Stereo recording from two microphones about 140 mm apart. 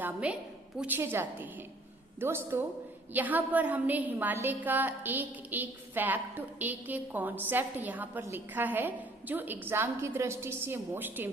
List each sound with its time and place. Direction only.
0.0 s a woman's voice: 10° right (ahead or behind)